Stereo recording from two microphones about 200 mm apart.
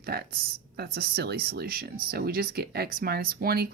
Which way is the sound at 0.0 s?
50° right (ahead or behind).